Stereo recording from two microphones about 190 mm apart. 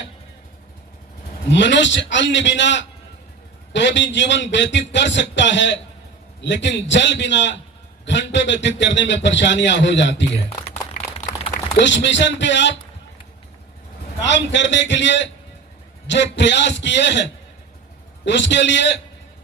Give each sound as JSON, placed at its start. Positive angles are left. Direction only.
{"t": 1.5, "sound": "a man's voice", "side_deg": 70}
{"t": 10.9, "sound": "a sound", "side_deg": 40}
{"t": 11.8, "sound": "a man's voice", "side_deg": 70}
{"t": 14.3, "sound": "a man's voice", "side_deg": 70}
{"t": 18.3, "sound": "a man's voice", "side_deg": 70}